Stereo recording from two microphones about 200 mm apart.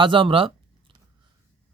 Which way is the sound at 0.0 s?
25° right (ahead or behind).